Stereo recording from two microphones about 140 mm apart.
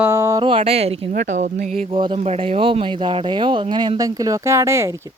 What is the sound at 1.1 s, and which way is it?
Speech, 65° right (ahead or behind).